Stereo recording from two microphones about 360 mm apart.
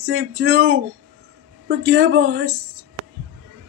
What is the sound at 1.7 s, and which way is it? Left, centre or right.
Speech, right.